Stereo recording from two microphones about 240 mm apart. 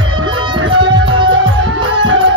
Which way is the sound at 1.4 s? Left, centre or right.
Right.